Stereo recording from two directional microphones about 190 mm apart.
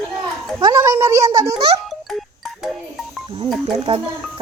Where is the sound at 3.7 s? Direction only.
30° right (ahead or behind).